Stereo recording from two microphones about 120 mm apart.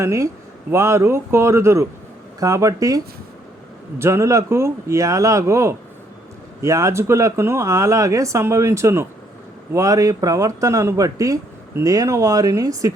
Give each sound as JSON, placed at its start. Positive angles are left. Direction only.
{"t": 0.0, "sound": "speech", "side_deg": -25}